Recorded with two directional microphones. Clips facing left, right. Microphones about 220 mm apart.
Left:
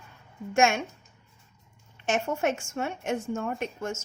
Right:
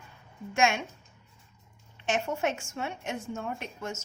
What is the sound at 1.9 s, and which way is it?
A woman's voice, 45° left (ahead or behind).